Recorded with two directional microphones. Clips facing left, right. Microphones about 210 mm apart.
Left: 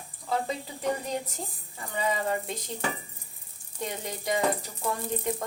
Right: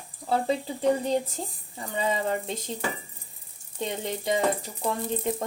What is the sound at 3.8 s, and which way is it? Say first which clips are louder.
Speech: right 4 dB; 25° right (ahead or behind).